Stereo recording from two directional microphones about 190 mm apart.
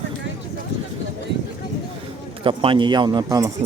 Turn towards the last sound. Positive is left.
turn(degrees=-20)  # may be behind; listen again after turning